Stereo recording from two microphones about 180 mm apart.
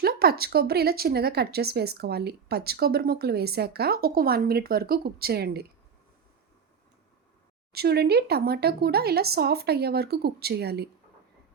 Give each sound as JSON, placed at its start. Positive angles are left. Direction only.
{"t": 0.0, "sound": "speech", "side_deg": -60}
{"t": 7.7, "sound": "speech", "side_deg": -60}